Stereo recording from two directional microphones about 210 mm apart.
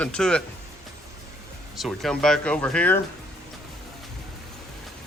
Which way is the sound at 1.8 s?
Centre (ahead or behind).